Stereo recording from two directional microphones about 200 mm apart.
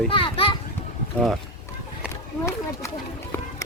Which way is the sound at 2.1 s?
15° left (ahead or behind).